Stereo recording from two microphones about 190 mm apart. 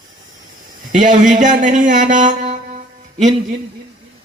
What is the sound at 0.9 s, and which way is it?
Speech, 40° right (ahead or behind).